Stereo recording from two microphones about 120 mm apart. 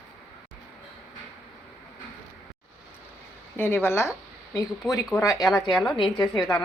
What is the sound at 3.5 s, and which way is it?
Speech, 15° left (ahead or behind).